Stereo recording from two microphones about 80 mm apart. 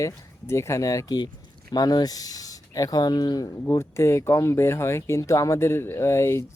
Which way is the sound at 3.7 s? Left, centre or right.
Left.